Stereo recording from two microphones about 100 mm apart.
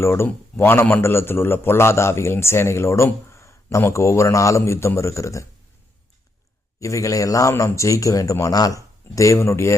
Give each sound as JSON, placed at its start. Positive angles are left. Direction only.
{"t": 0.0, "sound": "a man's voice", "side_deg": 25}
{"t": 6.7, "sound": "speech", "side_deg": 35}